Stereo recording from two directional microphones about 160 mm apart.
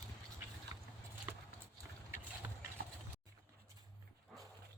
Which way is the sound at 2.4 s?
15° right (ahead or behind).